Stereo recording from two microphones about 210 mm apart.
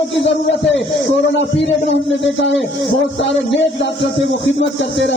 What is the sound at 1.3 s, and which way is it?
Speech, 60° left (ahead or behind).